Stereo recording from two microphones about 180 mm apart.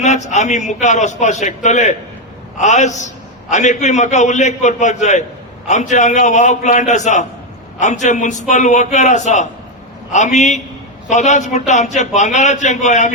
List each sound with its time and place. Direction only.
0.0 s a man's voice: 40° left (ahead or behind)